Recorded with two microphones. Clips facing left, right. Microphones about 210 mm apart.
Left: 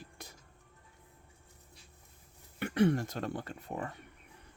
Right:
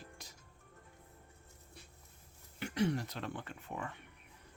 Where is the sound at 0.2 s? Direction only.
55° left (ahead or behind).